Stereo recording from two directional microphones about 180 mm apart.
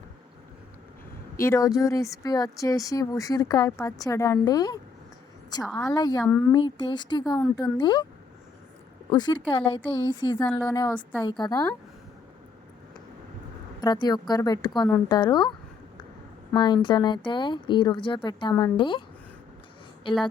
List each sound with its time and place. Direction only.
1.4 s speech: 15° left (ahead or behind)
9.0 s speech: 25° left (ahead or behind)
10.3 s speech: 10° left (ahead or behind)
10.6 s speech: 20° left (ahead or behind)
13.8 s speech: 25° left (ahead or behind)
16.6 s speech: 25° left (ahead or behind)